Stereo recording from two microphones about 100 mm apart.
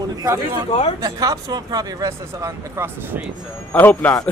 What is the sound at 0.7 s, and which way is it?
Speech, 90° left.